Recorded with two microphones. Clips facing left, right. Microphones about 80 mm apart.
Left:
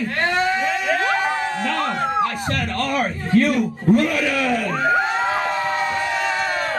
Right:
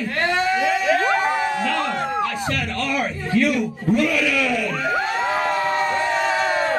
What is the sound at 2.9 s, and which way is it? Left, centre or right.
A man's voice, left.